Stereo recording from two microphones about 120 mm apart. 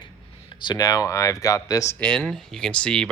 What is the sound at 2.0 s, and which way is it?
Speech, 5° left (ahead or behind).